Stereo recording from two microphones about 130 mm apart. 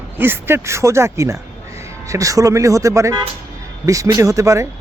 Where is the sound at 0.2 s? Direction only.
15° right (ahead or behind).